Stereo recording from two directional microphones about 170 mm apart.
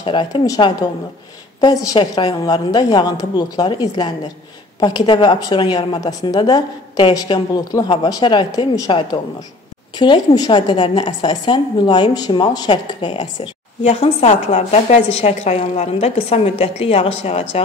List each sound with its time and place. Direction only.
0.0 s a woman's voice: 30° left (ahead or behind)